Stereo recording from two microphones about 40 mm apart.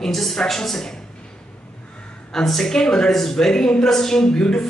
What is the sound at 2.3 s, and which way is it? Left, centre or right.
A man's voice, centre.